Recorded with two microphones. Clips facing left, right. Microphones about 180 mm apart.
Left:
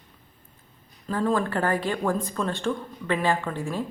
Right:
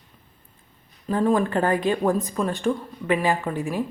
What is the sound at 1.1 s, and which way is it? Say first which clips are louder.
A woman's voice: right 4 dB; 15° right (ahead or behind).